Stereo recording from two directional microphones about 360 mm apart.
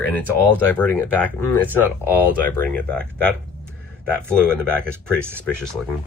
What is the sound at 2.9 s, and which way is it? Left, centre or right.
Speech, centre.